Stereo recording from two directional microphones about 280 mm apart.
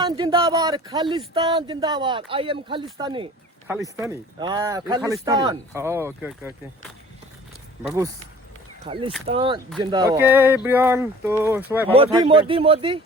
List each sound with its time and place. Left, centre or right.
0.0 s speech: centre
7.9 s speech: centre
12.2 s speech: centre